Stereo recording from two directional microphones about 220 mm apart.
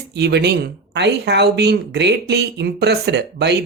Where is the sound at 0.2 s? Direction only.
50° right (ahead or behind).